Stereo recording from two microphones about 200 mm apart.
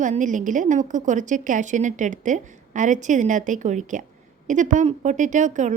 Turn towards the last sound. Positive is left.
turn(degrees=-40)  # may be behind; listen again after turning